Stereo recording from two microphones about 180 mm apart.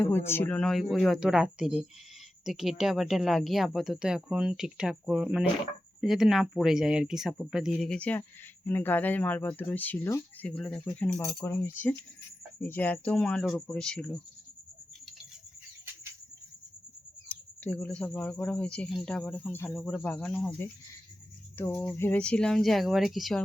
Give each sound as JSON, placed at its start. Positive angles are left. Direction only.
{"t": 0.0, "sound": "speech", "side_deg": 10}
{"t": 17.2, "sound": "speech", "side_deg": 10}